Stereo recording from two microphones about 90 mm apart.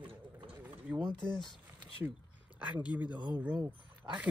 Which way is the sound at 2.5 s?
15° right (ahead or behind).